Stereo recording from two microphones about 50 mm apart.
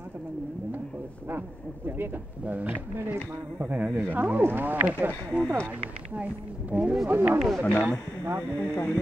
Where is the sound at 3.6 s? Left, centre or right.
Right.